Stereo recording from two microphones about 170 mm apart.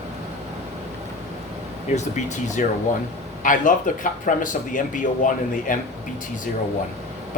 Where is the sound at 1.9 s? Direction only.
45° left (ahead or behind).